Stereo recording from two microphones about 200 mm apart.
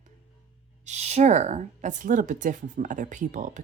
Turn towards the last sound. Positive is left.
turn(degrees=-40)  # may be behind; listen again after turning